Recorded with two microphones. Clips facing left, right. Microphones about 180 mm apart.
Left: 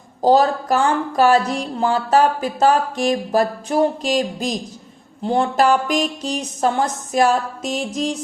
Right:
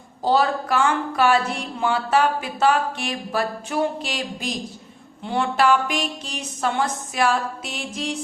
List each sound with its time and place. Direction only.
0.2 s speech: 40° left (ahead or behind)